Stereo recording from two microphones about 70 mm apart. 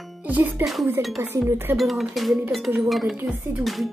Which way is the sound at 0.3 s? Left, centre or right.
Right.